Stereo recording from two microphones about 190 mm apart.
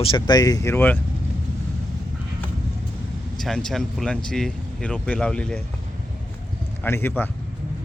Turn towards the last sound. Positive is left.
turn(degrees=10)  # may be behind; listen again after turning